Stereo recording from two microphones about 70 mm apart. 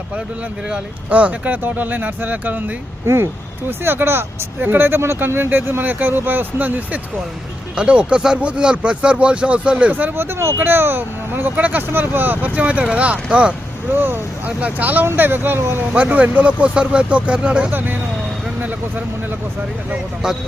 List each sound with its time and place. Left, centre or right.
0.7 s speech: centre
3.1 s speech: right; by 9.9 s centre
9.9 s speech: right
13.9 s speech: right
15.9 s speech: centre
17.7 s speech: right
20.2 s speech: centre